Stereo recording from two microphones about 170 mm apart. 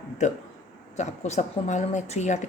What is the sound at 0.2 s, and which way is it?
Speech, 45° left (ahead or behind).